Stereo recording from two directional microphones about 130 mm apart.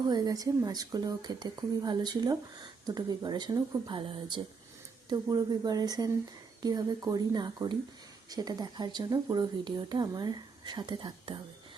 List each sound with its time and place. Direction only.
0.1 s speech: 30° right (ahead or behind)